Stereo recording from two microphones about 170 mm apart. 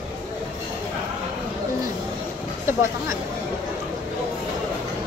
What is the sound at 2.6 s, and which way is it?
Speech, 15° right (ahead or behind).